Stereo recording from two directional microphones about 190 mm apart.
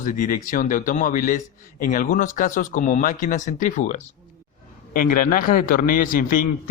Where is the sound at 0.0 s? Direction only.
45° left (ahead or behind).